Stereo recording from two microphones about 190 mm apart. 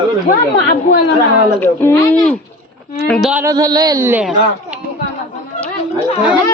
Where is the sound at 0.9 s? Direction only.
55° left (ahead or behind).